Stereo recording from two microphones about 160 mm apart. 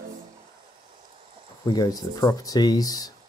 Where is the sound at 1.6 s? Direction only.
25° left (ahead or behind).